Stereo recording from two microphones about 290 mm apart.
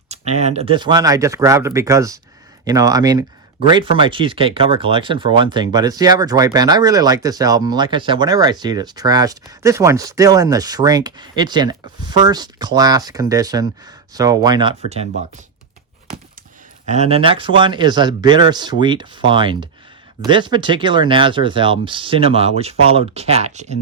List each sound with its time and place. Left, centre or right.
0.1 s speech: right
16.8 s speech: right